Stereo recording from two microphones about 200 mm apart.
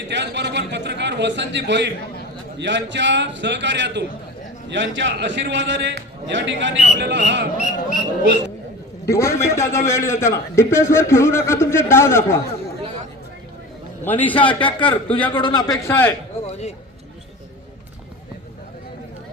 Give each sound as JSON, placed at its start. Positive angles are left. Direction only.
{"t": 0.1, "sound": "a man's voice", "side_deg": -60}
{"t": 7.6, "sound": "speech", "side_deg": 40}
{"t": 9.0, "sound": "a man's voice", "side_deg": 15}
{"t": 14.0, "sound": "a man's voice", "side_deg": 10}
{"t": 14.3, "sound": "a man's voice", "side_deg": 25}
{"t": 16.5, "sound": "speech", "side_deg": 35}